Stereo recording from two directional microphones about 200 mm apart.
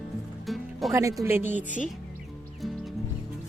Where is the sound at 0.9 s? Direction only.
15° right (ahead or behind).